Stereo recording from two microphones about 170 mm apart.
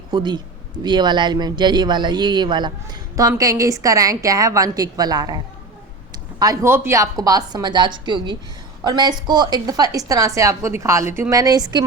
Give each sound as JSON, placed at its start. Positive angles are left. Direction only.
{"t": 0.1, "sound": "a man's voice", "side_deg": -25}
{"t": 6.4, "sound": "a woman's voice", "side_deg": -20}